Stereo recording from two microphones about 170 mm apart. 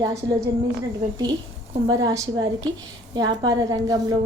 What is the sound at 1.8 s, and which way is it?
A woman's voice, 25° right (ahead or behind).